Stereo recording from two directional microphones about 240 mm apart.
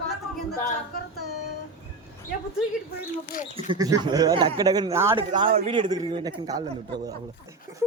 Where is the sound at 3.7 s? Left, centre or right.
Centre.